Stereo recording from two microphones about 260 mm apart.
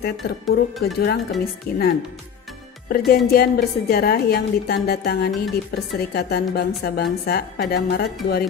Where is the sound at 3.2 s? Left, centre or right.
Left.